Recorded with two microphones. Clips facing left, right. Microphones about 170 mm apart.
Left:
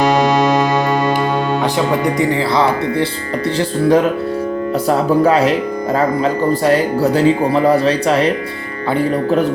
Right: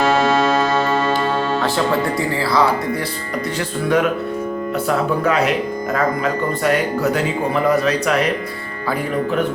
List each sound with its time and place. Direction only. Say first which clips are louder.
0.0 s music: left 3 dB; 15° left (ahead or behind)
1.6 s speech: left 3 dB; 15° left (ahead or behind)
3.6 s speech: left 5 dB; 35° left (ahead or behind)